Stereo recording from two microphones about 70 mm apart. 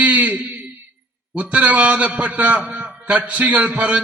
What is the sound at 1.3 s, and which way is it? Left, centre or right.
A man's voice, right.